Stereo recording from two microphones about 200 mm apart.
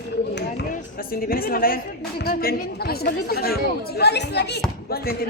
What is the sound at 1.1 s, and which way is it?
A woman's voice, 50° left (ahead or behind).